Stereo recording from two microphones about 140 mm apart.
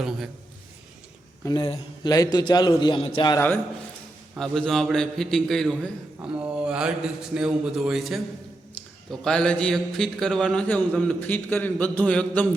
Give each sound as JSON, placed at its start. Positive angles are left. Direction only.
{"t": 0.0, "sound": "speech", "side_deg": 0}
{"t": 1.5, "sound": "a man's voice", "side_deg": 30}
{"t": 4.4, "sound": "speech", "side_deg": 0}